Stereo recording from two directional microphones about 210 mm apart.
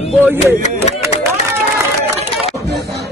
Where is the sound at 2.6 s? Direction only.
50° right (ahead or behind).